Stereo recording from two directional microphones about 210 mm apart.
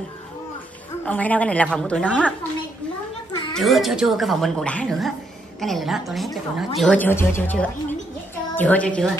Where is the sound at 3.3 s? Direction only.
20° left (ahead or behind).